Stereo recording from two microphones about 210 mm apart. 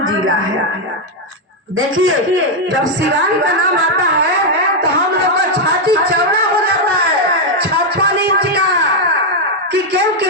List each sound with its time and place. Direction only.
0.0 s speech: 75° right (ahead or behind)
2.0 s a man's voice: 70° right (ahead or behind)
5.8 s a sound: 45° right (ahead or behind)
7.6 s music: 50° right (ahead or behind)
9.9 s speech: 55° right (ahead or behind)